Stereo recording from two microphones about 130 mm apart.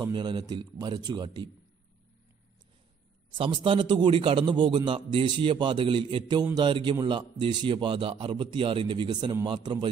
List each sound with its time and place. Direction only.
0.0 s a man's voice: 35° right (ahead or behind)
3.3 s a man's voice: 40° right (ahead or behind)